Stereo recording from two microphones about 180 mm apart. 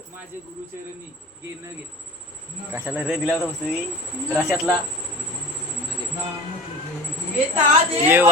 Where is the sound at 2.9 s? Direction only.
5° right (ahead or behind).